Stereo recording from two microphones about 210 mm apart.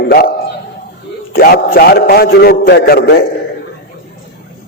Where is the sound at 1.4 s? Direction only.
45° left (ahead or behind).